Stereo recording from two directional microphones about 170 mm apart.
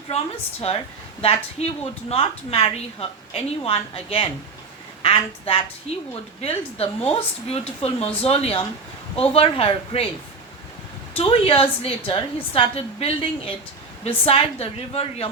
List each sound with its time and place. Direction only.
1.2 s a woman's voice: 35° left (ahead or behind)
11.2 s a woman's voice: 35° left (ahead or behind)